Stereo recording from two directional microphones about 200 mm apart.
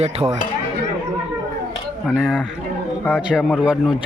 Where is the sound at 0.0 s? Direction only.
30° right (ahead or behind).